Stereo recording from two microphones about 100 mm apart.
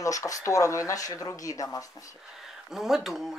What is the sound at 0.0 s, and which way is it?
Speech, 35° left (ahead or behind).